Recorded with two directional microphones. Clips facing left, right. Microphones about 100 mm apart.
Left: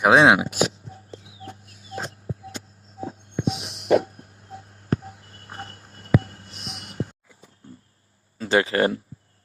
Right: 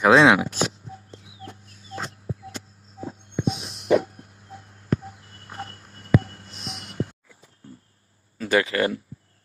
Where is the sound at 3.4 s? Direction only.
85° left.